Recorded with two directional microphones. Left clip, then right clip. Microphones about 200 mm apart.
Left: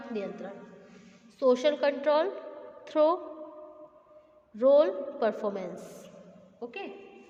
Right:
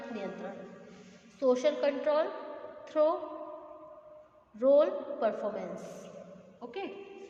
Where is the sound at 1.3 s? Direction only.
45° left (ahead or behind).